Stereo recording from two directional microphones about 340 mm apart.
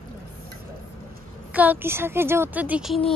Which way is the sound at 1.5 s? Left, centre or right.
Centre.